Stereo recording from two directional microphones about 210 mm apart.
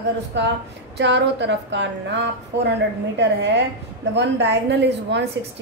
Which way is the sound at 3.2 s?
55° right (ahead or behind).